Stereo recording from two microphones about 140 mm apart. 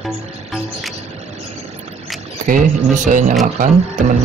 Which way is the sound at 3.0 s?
65° right (ahead or behind).